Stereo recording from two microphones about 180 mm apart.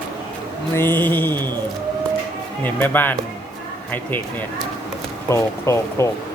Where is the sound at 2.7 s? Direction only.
10° left (ahead or behind).